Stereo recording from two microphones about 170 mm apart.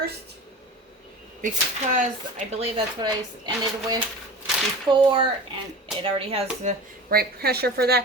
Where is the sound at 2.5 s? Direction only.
35° right (ahead or behind).